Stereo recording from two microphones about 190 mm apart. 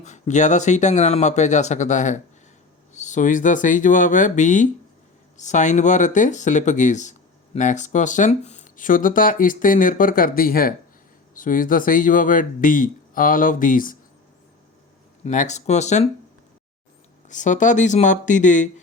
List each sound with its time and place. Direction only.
0.0 s speech: 40° left (ahead or behind)
15.2 s speech: 40° left (ahead or behind)
17.2 s speech: 40° left (ahead or behind)